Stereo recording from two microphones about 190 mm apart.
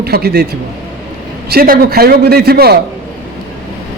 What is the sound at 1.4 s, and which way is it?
Speech, 50° right (ahead or behind).